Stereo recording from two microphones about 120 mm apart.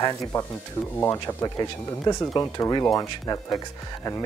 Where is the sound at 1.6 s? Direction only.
30° left (ahead or behind).